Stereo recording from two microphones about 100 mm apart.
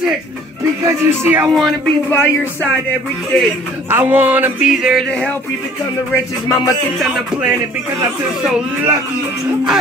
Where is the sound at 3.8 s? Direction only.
20° right (ahead or behind).